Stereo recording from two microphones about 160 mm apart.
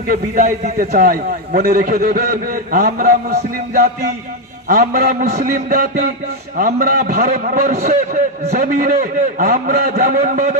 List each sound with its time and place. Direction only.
0.0 s a man's voice: 65° right (ahead or behind); by 3.9 s 80° right
4.6 s a man's voice: 70° right (ahead or behind)
5.4 s a man's voice: 60° right (ahead or behind)
10.1 s a man's voice: 50° right (ahead or behind)